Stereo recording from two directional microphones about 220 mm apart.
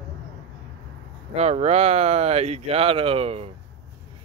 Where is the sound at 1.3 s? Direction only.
30° right (ahead or behind).